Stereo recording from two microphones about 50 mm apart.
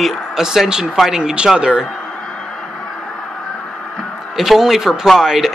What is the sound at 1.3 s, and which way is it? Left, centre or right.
Speech, centre.